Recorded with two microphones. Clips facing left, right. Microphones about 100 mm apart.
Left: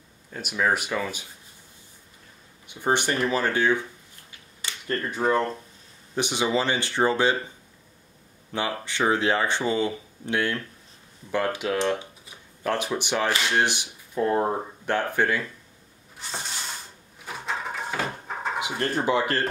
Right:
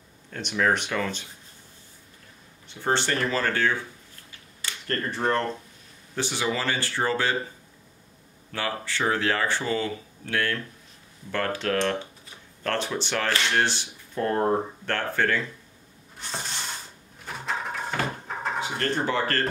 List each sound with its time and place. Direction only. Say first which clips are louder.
0.3 s speech: right 1 dB; 5° left (ahead or behind)
2.7 s speech: left 1 dB; 15° left (ahead or behind)
6.1 s speech: left 3 dB; 20° left (ahead or behind)
8.5 s speech: left 2 dB; 20° left (ahead or behind)
17.5 s a sound: even; centre (ahead or behind)
18.6 s speech: even; 15° left (ahead or behind)